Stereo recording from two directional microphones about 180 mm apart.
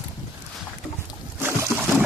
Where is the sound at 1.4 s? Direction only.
10° right (ahead or behind).